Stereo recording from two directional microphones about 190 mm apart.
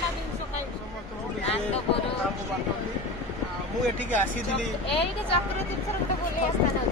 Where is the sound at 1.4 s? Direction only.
30° left (ahead or behind).